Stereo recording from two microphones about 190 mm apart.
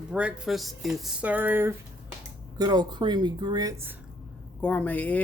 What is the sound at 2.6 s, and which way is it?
Speech, 20° right (ahead or behind).